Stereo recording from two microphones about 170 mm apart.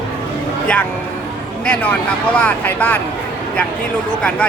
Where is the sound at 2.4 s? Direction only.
10° left (ahead or behind).